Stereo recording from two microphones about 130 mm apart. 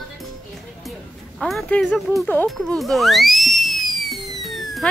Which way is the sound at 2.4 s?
Centre (ahead or behind).